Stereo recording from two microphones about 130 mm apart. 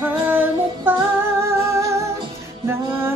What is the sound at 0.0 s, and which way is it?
Music, 15° right (ahead or behind).